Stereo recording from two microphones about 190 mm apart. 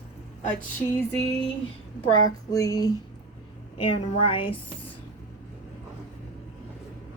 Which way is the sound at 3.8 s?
30° left (ahead or behind).